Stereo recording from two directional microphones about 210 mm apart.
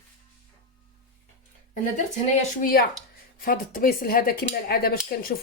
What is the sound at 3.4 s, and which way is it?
Cutlery, 40° left (ahead or behind).